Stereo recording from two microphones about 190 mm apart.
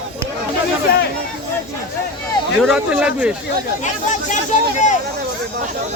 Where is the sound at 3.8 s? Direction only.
40° left (ahead or behind).